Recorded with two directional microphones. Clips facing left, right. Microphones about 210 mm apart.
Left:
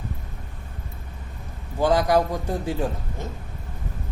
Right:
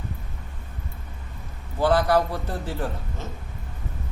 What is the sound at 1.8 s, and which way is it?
A man's voice, 15° left (ahead or behind).